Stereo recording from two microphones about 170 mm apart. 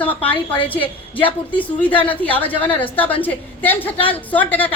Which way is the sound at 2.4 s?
10° left (ahead or behind).